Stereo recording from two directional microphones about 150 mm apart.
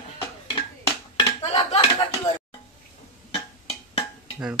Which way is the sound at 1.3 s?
35° left (ahead or behind).